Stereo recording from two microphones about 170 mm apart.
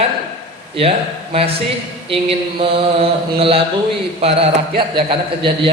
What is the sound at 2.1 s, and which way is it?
A man's voice, 35° right (ahead or behind).